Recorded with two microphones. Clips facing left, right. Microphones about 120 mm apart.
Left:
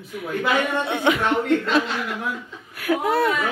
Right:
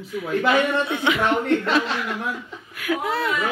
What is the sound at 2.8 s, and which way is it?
Speech, 45° left (ahead or behind).